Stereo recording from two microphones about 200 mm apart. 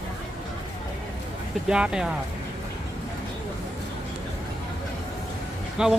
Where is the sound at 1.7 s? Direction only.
5° right (ahead or behind).